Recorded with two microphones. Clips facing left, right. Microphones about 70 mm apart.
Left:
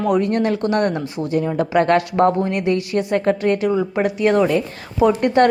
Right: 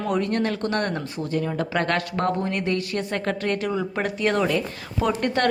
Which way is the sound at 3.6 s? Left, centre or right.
Centre.